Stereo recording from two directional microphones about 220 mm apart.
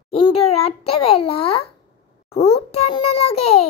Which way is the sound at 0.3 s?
25° left (ahead or behind).